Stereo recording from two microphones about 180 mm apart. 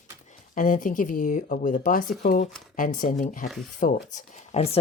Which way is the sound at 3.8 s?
40° left (ahead or behind).